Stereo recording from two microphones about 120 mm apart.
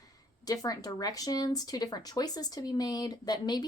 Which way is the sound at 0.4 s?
30° left (ahead or behind).